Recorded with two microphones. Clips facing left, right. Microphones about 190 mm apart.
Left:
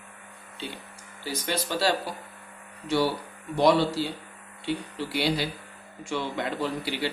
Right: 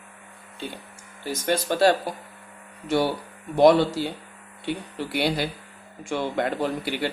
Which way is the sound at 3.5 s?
50° right (ahead or behind).